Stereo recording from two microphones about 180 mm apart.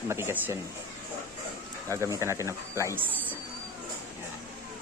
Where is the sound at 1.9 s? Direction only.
15° right (ahead or behind).